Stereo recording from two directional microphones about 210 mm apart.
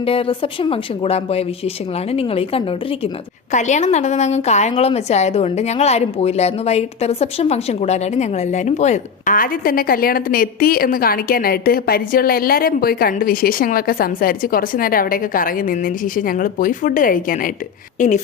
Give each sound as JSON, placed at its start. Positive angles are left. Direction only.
{"t": 0.0, "sound": "a woman's voice", "side_deg": 25}